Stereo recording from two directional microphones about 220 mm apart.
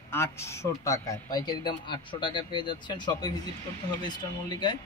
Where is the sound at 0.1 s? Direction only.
10° left (ahead or behind).